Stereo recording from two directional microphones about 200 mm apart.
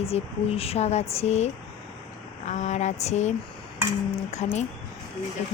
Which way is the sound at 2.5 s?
35° left (ahead or behind).